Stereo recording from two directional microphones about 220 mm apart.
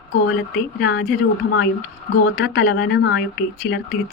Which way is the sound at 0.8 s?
45° left (ahead or behind).